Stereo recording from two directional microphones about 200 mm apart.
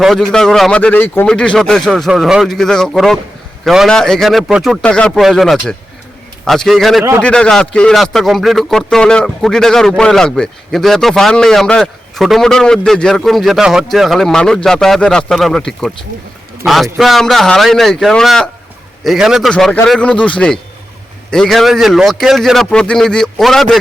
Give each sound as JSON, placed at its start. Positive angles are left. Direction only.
{"t": 0.0, "sound": "a man's voice", "side_deg": 0}